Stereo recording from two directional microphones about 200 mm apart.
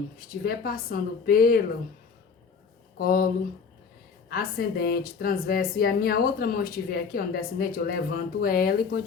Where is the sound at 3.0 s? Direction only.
45° left (ahead or behind).